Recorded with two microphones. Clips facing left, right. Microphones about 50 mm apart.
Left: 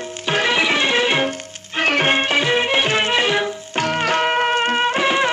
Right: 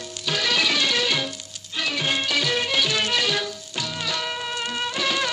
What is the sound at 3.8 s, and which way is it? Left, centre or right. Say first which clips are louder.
Music: left 11 dB; left.